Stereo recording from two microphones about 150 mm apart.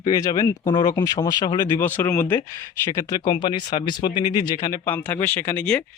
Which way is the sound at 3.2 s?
30° left (ahead or behind).